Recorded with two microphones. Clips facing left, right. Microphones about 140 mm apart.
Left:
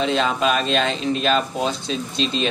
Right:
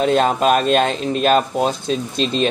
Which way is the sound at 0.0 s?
50° right (ahead or behind).